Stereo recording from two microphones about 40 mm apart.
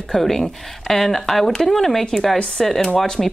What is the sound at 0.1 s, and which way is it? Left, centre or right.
Speech, centre.